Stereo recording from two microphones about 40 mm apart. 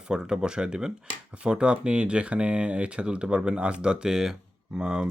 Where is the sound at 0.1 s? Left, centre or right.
Centre.